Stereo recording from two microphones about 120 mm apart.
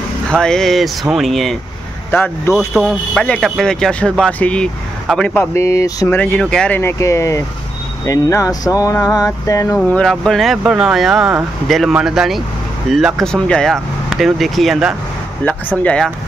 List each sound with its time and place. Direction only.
0.3 s speech: 5° left (ahead or behind)
2.0 s speech: 15° left (ahead or behind)
2.5 s speech: 5° right (ahead or behind)
5.5 s speech: 25° left (ahead or behind)
6.0 s speech: 15° left (ahead or behind)
6.8 s speech: 25° left (ahead or behind)
9.8 s speech: 5° left (ahead or behind)
15.8 s speech: 10° left (ahead or behind)